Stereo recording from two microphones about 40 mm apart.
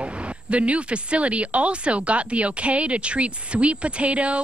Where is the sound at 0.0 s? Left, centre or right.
Right.